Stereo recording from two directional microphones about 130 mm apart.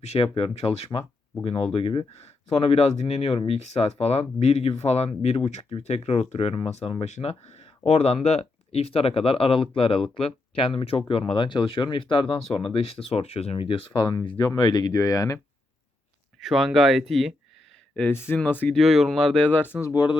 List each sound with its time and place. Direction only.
0.0 s speech: 50° left (ahead or behind); by 15.4 s 25° left (ahead or behind)
16.4 s speech: centre (ahead or behind)
17.9 s speech: 15° left (ahead or behind)
18.8 s speech: centre (ahead or behind)
19.5 s speech: 15° left (ahead or behind)
19.8 s speech: 30° left (ahead or behind)